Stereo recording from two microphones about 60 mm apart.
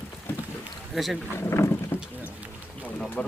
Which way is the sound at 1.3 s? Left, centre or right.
Left.